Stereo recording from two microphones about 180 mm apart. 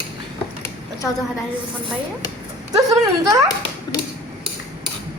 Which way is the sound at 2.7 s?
20° right (ahead or behind).